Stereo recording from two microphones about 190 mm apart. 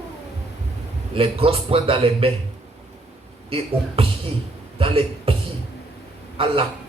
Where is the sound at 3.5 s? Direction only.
30° right (ahead or behind).